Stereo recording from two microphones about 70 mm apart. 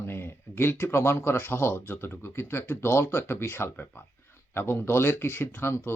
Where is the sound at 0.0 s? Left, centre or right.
Left.